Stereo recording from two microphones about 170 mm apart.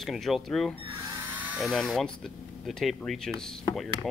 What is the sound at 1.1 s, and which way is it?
Speech, 10° right (ahead or behind).